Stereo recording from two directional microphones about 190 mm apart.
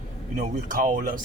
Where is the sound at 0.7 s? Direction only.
50° right (ahead or behind).